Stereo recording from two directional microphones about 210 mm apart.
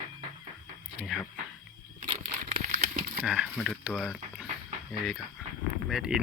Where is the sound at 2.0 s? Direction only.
30° right (ahead or behind).